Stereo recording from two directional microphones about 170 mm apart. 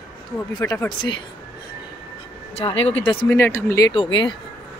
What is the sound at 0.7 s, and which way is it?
Speech, 25° left (ahead or behind).